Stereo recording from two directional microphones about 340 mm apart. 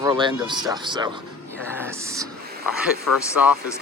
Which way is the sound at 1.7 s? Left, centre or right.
Centre.